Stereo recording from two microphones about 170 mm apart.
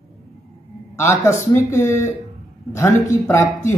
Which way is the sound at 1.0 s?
15° left (ahead or behind).